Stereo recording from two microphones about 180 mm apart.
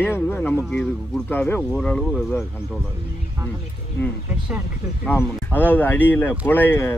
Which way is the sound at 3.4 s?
15° right (ahead or behind).